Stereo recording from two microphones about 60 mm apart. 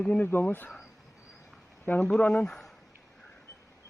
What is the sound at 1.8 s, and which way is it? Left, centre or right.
Speech, left.